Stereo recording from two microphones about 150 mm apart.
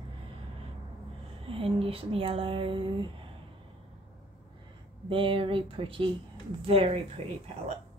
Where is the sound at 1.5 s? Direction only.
40° right (ahead or behind).